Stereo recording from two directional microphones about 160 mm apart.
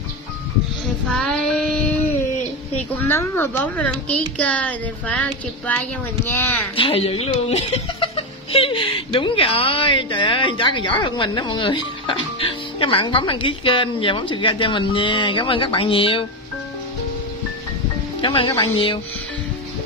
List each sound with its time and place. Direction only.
1.1 s child singing: 5° left (ahead or behind)
3.0 s speech: 15° left (ahead or behind)
6.8 s speech: 35° left (ahead or behind)
18.2 s speech: 30° left (ahead or behind)